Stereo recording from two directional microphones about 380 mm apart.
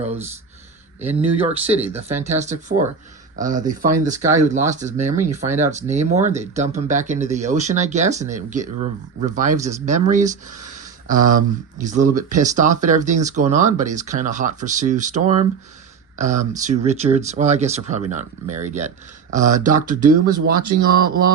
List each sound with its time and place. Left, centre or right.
1.0 s speech: centre